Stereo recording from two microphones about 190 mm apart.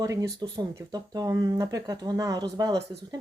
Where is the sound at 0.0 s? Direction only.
20° right (ahead or behind).